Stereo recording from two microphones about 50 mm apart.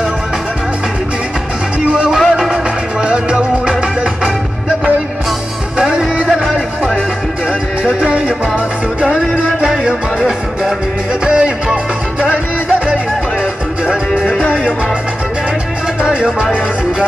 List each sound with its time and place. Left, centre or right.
2.0 s music: centre
2.5 s music: centre
5.8 s music: centre
9.4 s music: centre
16.0 s music: centre